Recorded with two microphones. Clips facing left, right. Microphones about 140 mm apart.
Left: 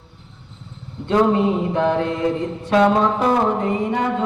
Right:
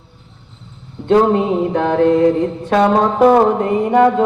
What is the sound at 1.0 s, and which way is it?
Music, 60° right (ahead or behind).